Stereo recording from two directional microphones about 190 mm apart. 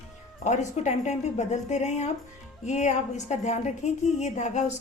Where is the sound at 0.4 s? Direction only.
40° left (ahead or behind).